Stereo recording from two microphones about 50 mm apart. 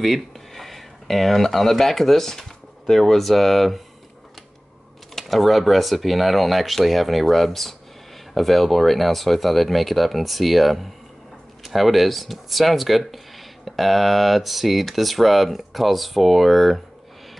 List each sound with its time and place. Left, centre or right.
0.0 s speech: centre
5.1 s speech: centre